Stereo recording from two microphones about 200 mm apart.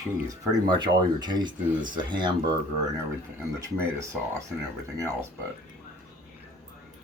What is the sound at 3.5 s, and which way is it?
Speech, 15° right (ahead or behind).